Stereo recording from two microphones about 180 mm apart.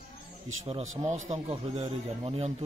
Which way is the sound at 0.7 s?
40° right (ahead or behind).